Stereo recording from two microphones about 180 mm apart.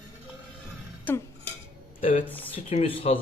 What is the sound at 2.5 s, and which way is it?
Speech, 35° left (ahead or behind).